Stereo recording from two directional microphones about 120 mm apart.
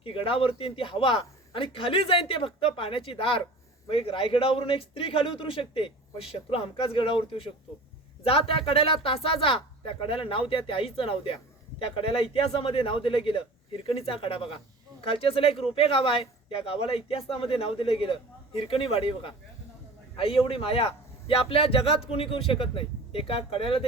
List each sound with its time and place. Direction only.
0.0 s speech: 50° left (ahead or behind)